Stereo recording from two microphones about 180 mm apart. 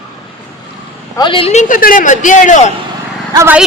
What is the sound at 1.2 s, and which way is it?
A man's voice, 30° left (ahead or behind).